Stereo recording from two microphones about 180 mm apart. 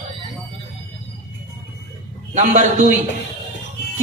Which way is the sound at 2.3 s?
40° right (ahead or behind).